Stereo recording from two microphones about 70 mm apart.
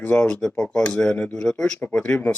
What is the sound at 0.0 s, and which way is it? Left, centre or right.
Speech, centre.